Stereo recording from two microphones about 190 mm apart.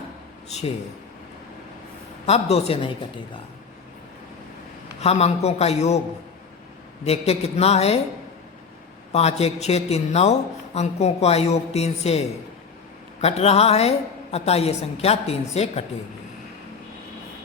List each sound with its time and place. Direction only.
0.4 s speech: 35° left (ahead or behind)
2.2 s a woman's voice: 35° left (ahead or behind)
4.9 s a woman's voice: 35° left (ahead or behind)
7.0 s a woman's voice: 35° left (ahead or behind)
9.1 s a woman's voice: 35° left (ahead or behind)
13.2 s a woman's voice: 35° left (ahead or behind)